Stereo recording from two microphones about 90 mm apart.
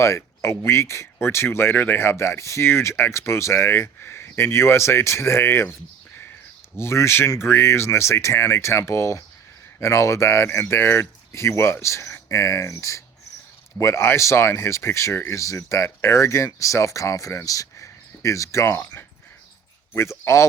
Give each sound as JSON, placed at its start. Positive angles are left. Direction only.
{"t": 0.0, "sound": "speech", "side_deg": 30}
{"t": 6.7, "sound": "speech", "side_deg": 30}
{"t": 19.9, "sound": "speech", "side_deg": 30}